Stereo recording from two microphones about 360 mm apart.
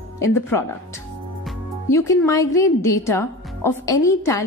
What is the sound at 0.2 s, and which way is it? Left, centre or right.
A woman's voice, centre.